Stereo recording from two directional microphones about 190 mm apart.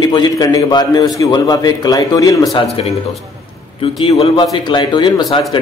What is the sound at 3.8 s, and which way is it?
A man's voice, 30° left (ahead or behind).